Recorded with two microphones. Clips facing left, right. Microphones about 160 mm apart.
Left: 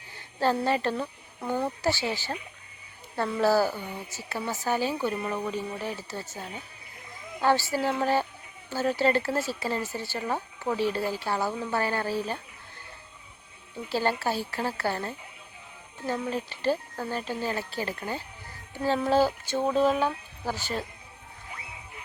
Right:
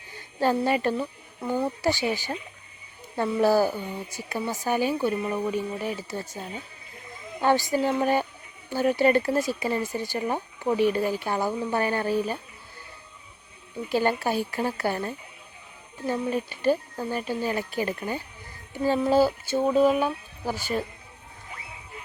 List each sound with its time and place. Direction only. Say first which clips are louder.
0.3 s speech: right 2 dB; 15° right (ahead or behind)
3.4 s speech: right 2 dB; 15° right (ahead or behind)
7.4 s speech: right 2 dB; 15° right (ahead or behind)
13.9 s speech: right 3 dB; 15° right (ahead or behind)